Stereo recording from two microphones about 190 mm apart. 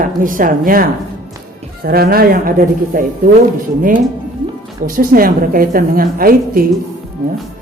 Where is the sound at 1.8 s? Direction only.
55° right (ahead or behind).